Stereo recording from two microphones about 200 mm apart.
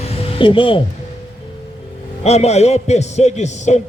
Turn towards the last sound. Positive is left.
turn(degrees=35)  # may be behind; listen again after turning